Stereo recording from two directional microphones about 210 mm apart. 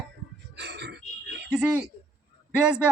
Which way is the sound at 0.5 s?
55° right (ahead or behind).